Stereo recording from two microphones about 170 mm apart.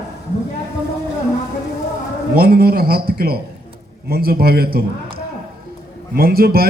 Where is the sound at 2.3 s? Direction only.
65° right (ahead or behind).